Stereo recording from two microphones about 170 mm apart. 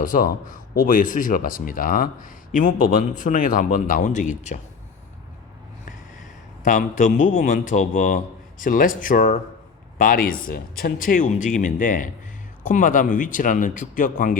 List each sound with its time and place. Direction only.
0.0 s speech: 55° left (ahead or behind)
6.7 s speech: 50° left (ahead or behind)